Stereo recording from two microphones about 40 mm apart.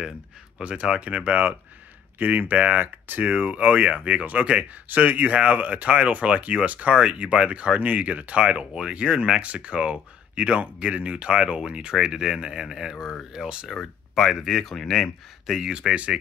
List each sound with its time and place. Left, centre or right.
0.6 s speech: right
4.8 s speech: right; by 13.1 s centre
13.7 s speech: left
14.1 s speech: centre
15.5 s speech: centre